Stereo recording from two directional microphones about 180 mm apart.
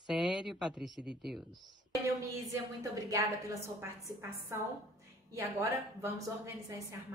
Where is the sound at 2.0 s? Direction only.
20° right (ahead or behind).